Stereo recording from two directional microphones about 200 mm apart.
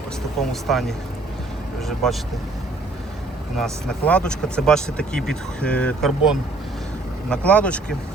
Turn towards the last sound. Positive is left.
turn(degrees=5)  # may be behind; listen again after turning